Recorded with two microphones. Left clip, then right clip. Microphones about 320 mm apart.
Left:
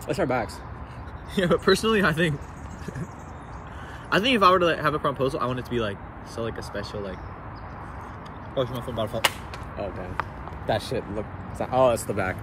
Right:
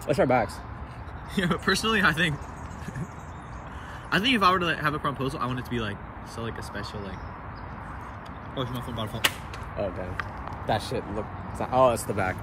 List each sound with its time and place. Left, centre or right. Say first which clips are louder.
0.1 s speech: right 3 dB; centre
1.3 s speech: left 5 dB; centre
4.1 s speech: left 3 dB; centre
8.5 s speech: left 6 dB; centre
10.7 s speech: left 2 dB; centre